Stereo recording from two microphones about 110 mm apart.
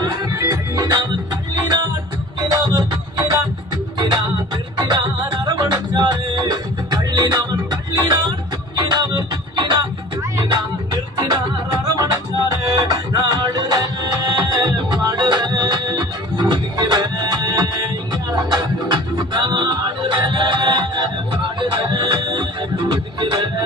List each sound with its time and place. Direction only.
0.0 s music: 25° right (ahead or behind); by 9.8 s 45° right (ahead or behind)
11.3 s music: 35° right (ahead or behind)